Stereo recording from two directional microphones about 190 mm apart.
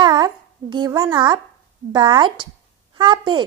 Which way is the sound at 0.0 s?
20° right (ahead or behind).